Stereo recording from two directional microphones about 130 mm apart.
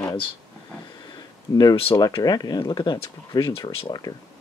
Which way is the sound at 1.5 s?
30° left (ahead or behind).